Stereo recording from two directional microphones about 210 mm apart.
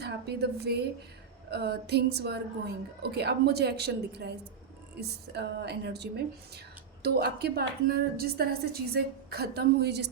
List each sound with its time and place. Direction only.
0.0 s a woman's voice: 50° right (ahead or behind)